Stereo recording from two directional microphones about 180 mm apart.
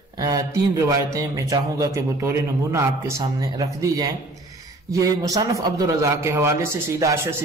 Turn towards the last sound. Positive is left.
turn(degrees=-15)  # may be behind; listen again after turning